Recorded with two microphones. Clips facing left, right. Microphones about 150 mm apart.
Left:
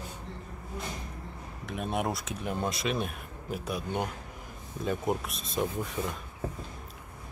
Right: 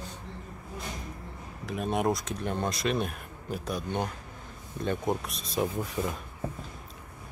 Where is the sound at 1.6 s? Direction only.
Centre (ahead or behind).